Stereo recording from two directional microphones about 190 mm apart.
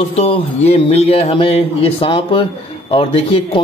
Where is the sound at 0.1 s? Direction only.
35° left (ahead or behind).